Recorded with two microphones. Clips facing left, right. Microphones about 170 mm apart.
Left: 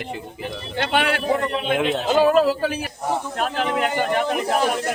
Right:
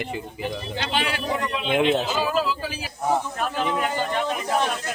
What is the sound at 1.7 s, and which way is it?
Speech, centre (ahead or behind).